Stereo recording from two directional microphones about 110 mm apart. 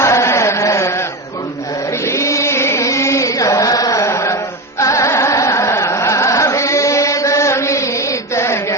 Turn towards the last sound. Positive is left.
turn(degrees=25)  # may be behind; listen again after turning